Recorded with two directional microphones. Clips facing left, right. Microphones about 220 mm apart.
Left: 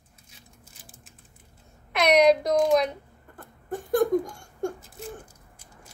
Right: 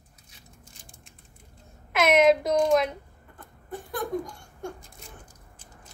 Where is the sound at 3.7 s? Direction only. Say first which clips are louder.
Left 10 dB; 45° left (ahead or behind).